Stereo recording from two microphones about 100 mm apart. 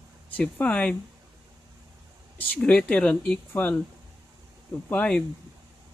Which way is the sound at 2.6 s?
10° left (ahead or behind).